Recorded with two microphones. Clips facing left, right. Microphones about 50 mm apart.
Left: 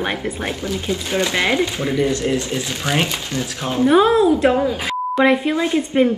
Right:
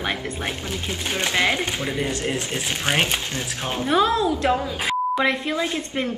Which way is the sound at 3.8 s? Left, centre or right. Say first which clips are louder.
Left 7 dB; centre.